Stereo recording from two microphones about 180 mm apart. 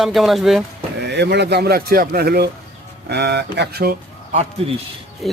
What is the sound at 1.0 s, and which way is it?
Speech, 70° right (ahead or behind).